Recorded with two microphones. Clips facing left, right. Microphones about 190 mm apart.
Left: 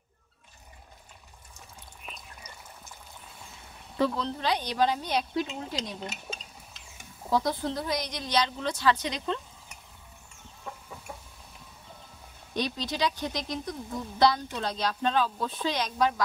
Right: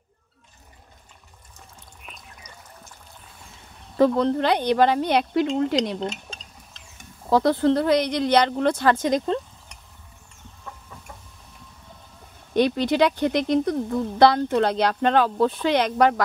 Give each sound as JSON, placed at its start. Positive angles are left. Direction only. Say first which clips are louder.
{"t": 4.0, "sound": "speech", "louder": "right 9 dB", "side_deg": -55}
{"t": 5.6, "sound": "cutlery", "louder": "right 13 dB", "side_deg": -70}
{"t": 7.2, "sound": "speech", "louder": "right 9 dB", "side_deg": -70}
{"t": 10.6, "sound": "chicken", "louder": "left 1 dB", "side_deg": 10}
{"t": 12.5, "sound": "speech", "louder": "right 12 dB", "side_deg": -60}